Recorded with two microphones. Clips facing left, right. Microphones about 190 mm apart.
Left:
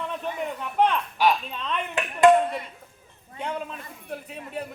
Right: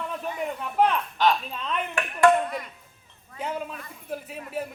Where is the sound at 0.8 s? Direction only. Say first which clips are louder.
Even; 5° right (ahead or behind).